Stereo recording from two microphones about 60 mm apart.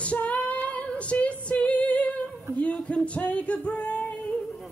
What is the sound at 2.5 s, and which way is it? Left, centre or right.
Music, left.